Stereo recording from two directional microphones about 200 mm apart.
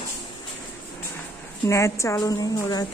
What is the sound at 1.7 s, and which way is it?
A woman's voice, 15° left (ahead or behind).